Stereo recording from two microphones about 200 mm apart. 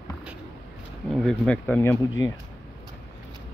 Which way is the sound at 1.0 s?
5° left (ahead or behind).